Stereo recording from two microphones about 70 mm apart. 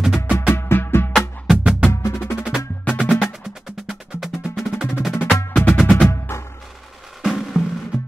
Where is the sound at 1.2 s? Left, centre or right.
Centre.